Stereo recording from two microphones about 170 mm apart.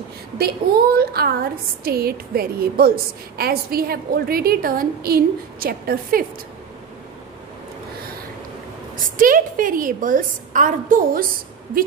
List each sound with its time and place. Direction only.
0.4 s a woman's voice: 65° right (ahead or behind)
9.0 s a woman's voice: 55° right (ahead or behind)